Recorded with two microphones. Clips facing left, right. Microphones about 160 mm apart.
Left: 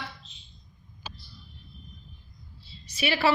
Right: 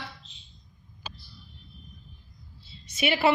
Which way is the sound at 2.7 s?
20° right (ahead or behind).